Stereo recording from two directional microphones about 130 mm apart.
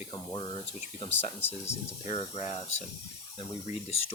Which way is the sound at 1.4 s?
15° left (ahead or behind).